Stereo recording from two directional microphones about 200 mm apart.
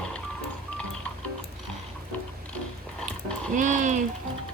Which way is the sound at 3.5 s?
40° right (ahead or behind).